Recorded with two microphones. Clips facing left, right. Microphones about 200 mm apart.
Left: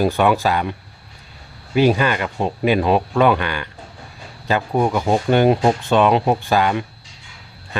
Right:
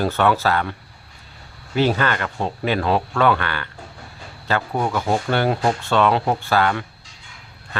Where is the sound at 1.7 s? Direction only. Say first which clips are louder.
Left 4 dB; 15° left (ahead or behind).